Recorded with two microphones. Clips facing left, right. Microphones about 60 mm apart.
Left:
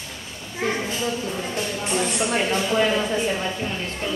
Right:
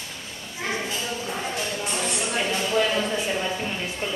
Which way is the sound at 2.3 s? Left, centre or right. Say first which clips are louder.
Left 3 dB; left.